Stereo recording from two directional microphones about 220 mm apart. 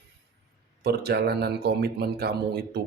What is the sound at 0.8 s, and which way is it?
Speech, 45° right (ahead or behind).